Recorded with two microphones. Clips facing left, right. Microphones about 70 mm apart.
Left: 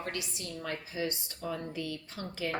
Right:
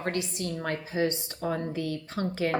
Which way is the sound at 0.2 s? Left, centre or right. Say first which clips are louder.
Right 8 dB; right.